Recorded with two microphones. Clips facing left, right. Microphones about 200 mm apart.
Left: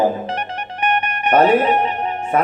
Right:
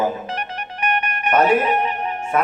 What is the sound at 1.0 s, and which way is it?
Music, 35° left (ahead or behind).